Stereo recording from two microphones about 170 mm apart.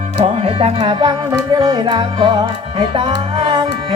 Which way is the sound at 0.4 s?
35° right (ahead or behind).